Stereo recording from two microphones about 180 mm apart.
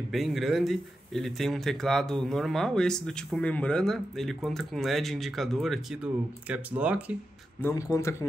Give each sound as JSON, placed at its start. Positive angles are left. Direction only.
{"t": 0.1, "sound": "speech", "side_deg": 0}
{"t": 7.6, "sound": "speech", "side_deg": 15}